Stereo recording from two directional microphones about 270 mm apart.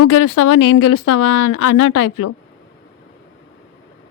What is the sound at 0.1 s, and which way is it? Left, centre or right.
Speech, left.